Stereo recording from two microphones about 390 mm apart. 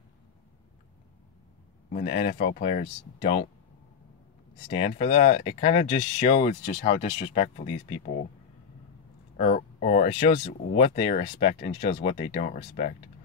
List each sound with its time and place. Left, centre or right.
1.9 s speech: left
4.6 s speech: centre
9.4 s speech: centre